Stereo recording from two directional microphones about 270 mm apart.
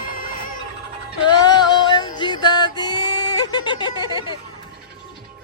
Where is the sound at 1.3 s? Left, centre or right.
Centre.